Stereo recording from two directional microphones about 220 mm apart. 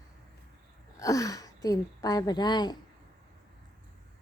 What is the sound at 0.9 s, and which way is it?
Speech, 15° left (ahead or behind).